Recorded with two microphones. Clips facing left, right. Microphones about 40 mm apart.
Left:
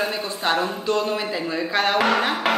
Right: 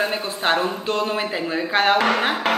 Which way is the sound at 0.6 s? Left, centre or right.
Centre.